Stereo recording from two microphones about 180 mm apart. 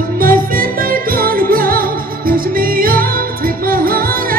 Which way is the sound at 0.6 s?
50° right (ahead or behind).